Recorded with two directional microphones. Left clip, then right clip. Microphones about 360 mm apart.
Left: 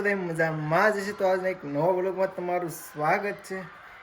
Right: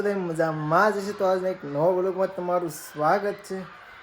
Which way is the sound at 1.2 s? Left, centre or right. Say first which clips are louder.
Right 1 dB; centre.